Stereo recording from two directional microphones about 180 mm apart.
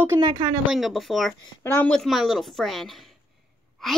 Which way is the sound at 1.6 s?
10° left (ahead or behind).